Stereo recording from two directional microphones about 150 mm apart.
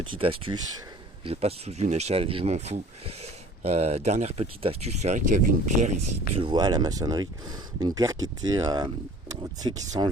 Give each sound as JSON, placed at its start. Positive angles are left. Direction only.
{"t": 0.0, "sound": "speech", "side_deg": -35}
{"t": 6.4, "sound": "speech", "side_deg": -30}